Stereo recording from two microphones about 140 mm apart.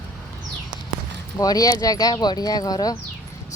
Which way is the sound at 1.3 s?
25° left (ahead or behind).